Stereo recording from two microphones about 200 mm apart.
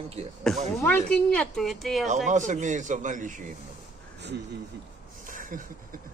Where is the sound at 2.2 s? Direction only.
40° right (ahead or behind).